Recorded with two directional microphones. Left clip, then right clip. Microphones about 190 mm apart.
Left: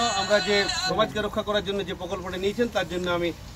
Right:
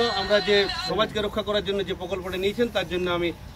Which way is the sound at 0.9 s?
5° right (ahead or behind).